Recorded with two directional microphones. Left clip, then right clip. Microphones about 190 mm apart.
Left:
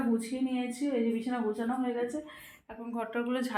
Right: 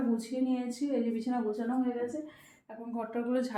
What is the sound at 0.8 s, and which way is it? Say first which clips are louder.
Speech: left 2 dB; 35° left (ahead or behind).